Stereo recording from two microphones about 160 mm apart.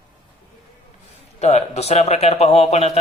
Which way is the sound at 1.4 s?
45° left (ahead or behind).